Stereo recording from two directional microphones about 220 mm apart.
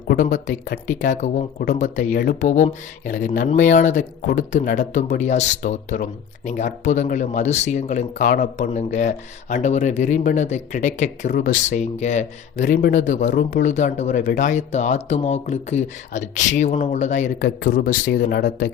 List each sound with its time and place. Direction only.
0.1 s speech: 35° left (ahead or behind)